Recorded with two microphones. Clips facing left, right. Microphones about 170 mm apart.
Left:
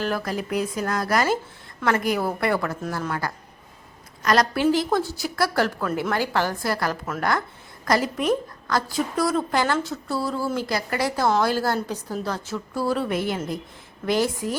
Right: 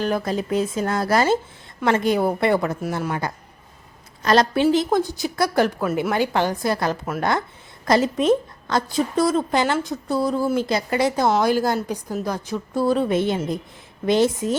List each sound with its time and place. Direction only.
0.0 s a woman's voice: 20° right (ahead or behind)